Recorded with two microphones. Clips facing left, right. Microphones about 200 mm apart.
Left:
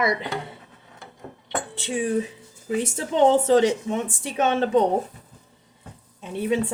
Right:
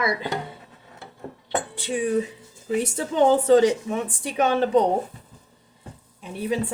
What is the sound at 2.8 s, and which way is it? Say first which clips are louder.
Speech: left 1 dB; 25° left (ahead or behind).